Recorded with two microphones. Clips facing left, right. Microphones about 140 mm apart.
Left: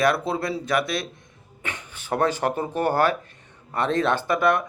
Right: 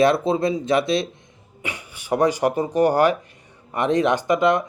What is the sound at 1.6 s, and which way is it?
Speech, 10° right (ahead or behind).